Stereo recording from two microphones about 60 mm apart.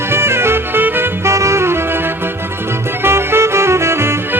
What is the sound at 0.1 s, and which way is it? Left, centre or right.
Music, right.